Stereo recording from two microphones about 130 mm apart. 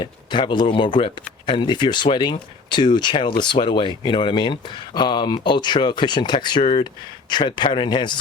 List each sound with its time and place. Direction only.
0.0 s speech: 40° left (ahead or behind)